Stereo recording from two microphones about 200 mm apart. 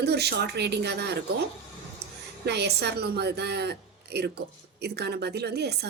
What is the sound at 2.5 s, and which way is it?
Speech, 55° right (ahead or behind).